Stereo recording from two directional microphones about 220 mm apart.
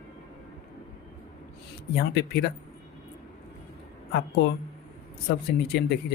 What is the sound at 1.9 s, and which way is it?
Speech, 45° left (ahead or behind).